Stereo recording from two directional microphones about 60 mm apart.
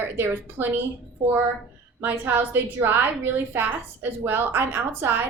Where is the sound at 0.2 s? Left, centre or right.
Right.